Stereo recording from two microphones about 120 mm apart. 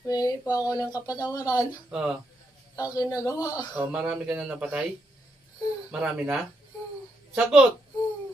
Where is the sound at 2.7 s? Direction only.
30° left (ahead or behind).